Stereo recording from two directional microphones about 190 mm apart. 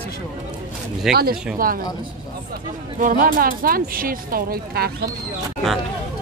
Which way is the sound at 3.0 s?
45° right (ahead or behind).